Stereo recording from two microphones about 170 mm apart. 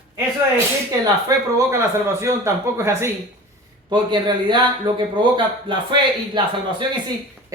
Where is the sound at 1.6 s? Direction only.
15° right (ahead or behind).